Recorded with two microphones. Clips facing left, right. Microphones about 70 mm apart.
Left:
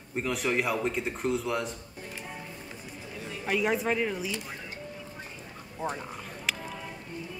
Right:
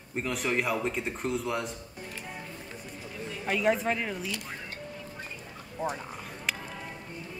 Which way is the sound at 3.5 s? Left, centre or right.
Centre.